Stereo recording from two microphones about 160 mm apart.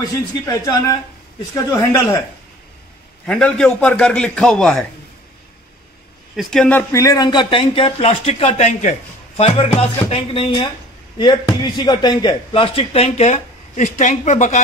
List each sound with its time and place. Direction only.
1.5 s speech: 20° left (ahead or behind)
3.3 s a man's voice: 5° left (ahead or behind)
6.3 s a man's voice: 5° left (ahead or behind)
6.9 s speech: 20° left (ahead or behind); by 14.6 s 50° left (ahead or behind)